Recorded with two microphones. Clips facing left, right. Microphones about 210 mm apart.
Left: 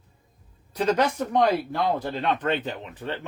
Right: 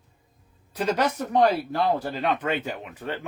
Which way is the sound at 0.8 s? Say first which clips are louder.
Left 3 dB; 10° right (ahead or behind).